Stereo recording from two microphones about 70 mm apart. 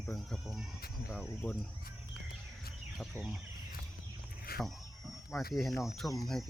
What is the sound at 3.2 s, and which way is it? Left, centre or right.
Speech, right.